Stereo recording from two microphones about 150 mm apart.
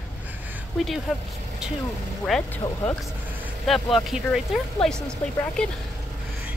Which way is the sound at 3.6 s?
Centre (ahead or behind).